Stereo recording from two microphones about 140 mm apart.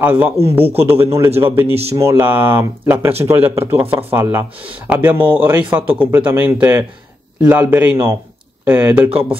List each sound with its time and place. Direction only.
0.0 s speech: 10° right (ahead or behind)
0.4 s a man's voice: 45° right (ahead or behind)
0.8 s speech: 15° right (ahead or behind)
1.7 s a man's voice: 45° right (ahead or behind)
2.0 s speech: 15° right (ahead or behind)